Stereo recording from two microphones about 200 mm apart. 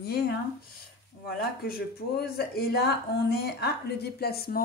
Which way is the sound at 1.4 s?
50° left (ahead or behind).